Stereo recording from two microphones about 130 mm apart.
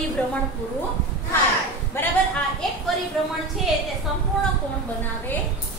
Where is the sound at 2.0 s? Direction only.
20° left (ahead or behind).